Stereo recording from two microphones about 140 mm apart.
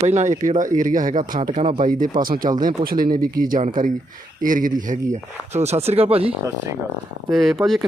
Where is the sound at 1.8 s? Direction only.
85° right.